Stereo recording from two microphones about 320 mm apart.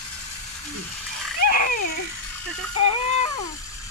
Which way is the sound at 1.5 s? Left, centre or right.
Left.